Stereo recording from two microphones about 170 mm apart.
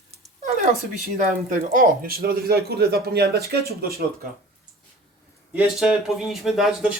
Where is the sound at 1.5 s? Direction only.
55° right (ahead or behind).